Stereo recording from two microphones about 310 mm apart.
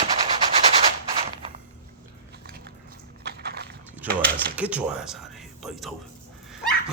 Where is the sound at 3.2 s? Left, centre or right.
Right.